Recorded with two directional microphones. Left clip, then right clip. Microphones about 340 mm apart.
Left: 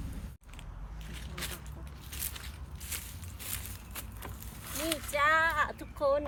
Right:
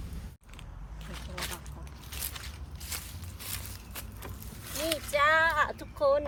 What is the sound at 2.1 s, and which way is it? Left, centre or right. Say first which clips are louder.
Biting: right 2 dB; centre.